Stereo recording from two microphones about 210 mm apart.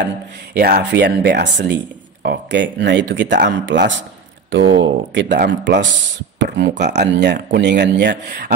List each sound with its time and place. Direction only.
0.6 s speech: 45° right (ahead or behind)